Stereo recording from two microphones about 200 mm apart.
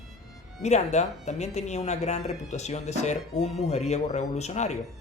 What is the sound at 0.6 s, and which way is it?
Speech, 35° left (ahead or behind).